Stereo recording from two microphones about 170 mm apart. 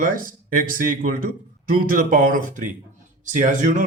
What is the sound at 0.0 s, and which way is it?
Speech, 55° right (ahead or behind).